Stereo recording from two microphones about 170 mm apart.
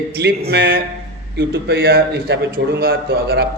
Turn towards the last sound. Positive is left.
turn(degrees=-65)  # may be behind; listen again after turning